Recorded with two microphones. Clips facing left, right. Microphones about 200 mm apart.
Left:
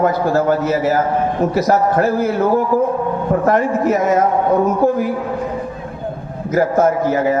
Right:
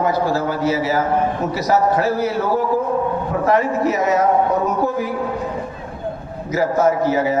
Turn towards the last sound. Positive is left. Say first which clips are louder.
# left 2 dB
turn(degrees=50)  # may be behind; listen again after turning